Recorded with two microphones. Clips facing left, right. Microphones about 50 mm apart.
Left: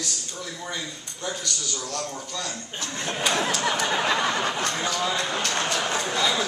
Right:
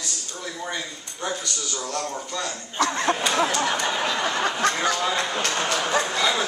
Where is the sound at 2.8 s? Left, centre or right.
Right.